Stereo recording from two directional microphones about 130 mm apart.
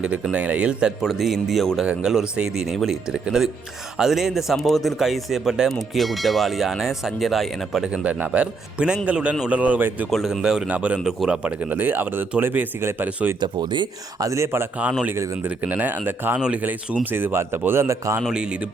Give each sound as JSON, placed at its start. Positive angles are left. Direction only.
{"t": 0.0, "sound": "a man's voice", "side_deg": -10}
{"t": 10.1, "sound": "speech", "side_deg": 0}
{"t": 13.4, "sound": "speech", "side_deg": -35}
{"t": 14.3, "sound": "speech", "side_deg": -20}
{"t": 18.2, "sound": "speech", "side_deg": -5}